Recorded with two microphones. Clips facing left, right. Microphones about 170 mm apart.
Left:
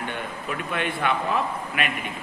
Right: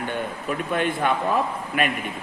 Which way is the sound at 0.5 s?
45° right (ahead or behind).